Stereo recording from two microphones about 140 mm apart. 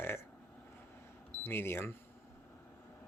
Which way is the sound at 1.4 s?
15° left (ahead or behind).